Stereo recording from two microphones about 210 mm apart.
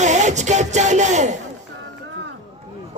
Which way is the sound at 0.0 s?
35° right (ahead or behind).